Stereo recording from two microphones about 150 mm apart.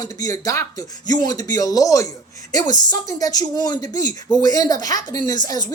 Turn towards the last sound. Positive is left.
turn(degrees=25)  # may be behind; listen again after turning